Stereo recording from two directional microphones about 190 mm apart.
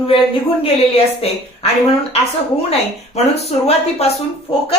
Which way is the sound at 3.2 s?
35° left (ahead or behind).